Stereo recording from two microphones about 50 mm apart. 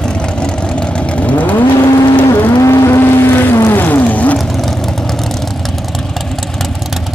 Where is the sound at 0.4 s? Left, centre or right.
Centre.